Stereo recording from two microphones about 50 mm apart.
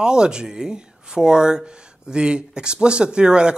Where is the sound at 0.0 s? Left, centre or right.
Centre.